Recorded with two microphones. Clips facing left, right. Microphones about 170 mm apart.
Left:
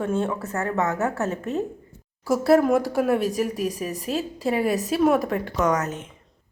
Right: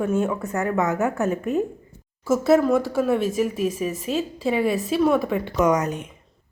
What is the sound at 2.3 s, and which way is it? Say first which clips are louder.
Speech: even; 35° left (ahead or behind).